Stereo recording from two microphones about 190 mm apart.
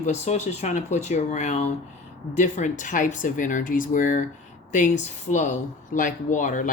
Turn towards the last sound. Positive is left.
turn(degrees=40)  # may be behind; listen again after turning